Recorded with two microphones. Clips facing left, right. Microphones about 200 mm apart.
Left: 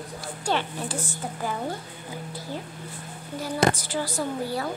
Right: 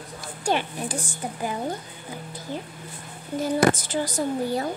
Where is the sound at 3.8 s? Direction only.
20° right (ahead or behind).